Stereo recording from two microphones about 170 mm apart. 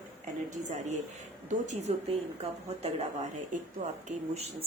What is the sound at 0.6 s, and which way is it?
Speech, 45° right (ahead or behind).